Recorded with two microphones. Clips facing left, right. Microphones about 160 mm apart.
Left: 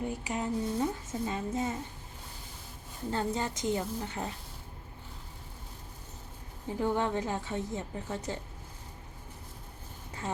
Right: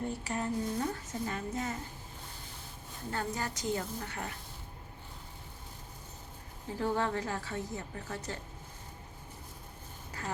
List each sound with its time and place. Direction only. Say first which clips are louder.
0.0 s music: left 1 dB; 15° left (ahead or behind)
3.1 s a woman's voice: left 4 dB; 25° left (ahead or behind)
6.7 s a woman's voice: left 2 dB; 20° left (ahead or behind)
10.1 s vehicle: left 3 dB; 25° left (ahead or behind)